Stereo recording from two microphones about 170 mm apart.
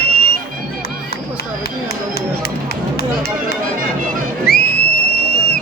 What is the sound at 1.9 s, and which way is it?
Run, 65° left (ahead or behind).